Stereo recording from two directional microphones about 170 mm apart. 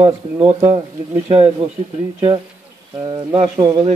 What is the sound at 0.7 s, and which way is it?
Speech, 35° right (ahead or behind).